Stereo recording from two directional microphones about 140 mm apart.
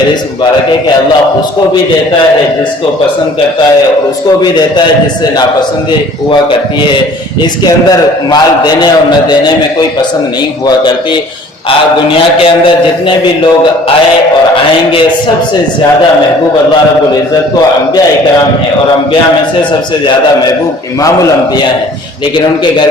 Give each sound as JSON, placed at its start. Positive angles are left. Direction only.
{"t": 7.6, "sound": "a man's voice", "side_deg": 30}
{"t": 12.4, "sound": "a man's voice", "side_deg": 40}